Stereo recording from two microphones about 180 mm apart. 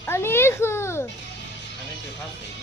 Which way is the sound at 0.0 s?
15° left (ahead or behind).